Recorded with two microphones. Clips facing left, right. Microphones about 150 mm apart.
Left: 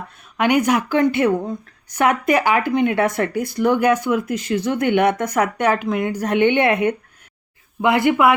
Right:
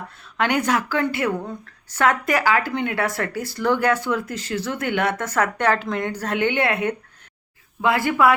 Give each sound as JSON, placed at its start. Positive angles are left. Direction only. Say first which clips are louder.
{"t": 0.3, "sound": "speech", "louder": "left 4 dB", "side_deg": 15}